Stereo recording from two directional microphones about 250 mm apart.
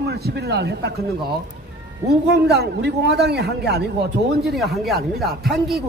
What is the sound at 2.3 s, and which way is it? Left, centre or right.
A man's voice, right.